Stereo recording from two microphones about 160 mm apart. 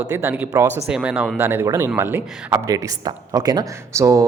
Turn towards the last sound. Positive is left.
turn(degrees=-20)  # may be behind; listen again after turning